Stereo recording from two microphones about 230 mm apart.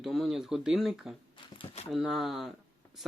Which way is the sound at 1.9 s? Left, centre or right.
Centre.